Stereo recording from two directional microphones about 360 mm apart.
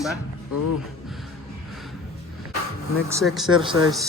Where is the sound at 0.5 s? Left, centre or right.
Left.